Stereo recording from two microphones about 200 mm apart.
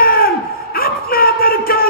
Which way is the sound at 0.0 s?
45° left (ahead or behind).